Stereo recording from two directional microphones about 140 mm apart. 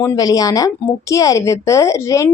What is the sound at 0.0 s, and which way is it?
A woman's voice, 25° left (ahead or behind).